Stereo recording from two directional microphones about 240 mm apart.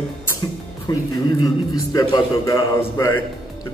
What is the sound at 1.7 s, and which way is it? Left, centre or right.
A man's voice, centre.